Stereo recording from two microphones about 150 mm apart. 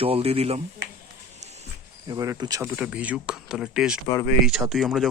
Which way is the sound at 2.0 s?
25° right (ahead or behind).